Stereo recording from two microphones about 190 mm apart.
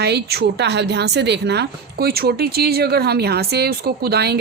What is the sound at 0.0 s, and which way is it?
A woman's voice, 60° right (ahead or behind).